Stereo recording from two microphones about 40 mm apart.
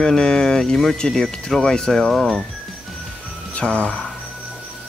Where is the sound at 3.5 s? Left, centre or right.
Left.